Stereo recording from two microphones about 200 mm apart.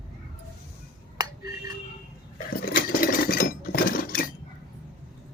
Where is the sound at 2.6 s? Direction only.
45° left (ahead or behind).